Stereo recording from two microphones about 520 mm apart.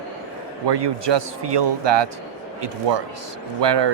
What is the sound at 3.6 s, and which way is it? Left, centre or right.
Speech, right.